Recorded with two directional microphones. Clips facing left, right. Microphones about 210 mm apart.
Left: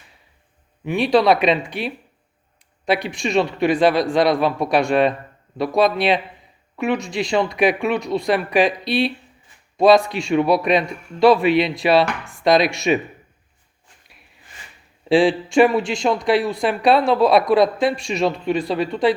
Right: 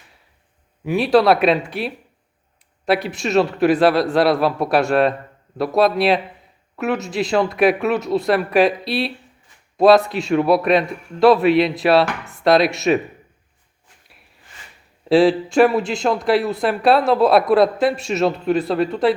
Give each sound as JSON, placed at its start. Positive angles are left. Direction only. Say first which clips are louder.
{"t": 0.9, "sound": "speech", "louder": "right 1 dB", "side_deg": -5}
{"t": 15.1, "sound": "speech", "louder": "right 1 dB", "side_deg": 0}